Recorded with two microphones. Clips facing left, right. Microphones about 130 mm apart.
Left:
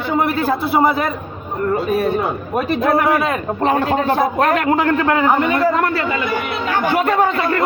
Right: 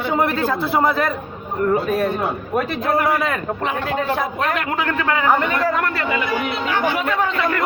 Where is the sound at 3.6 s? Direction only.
45° left (ahead or behind).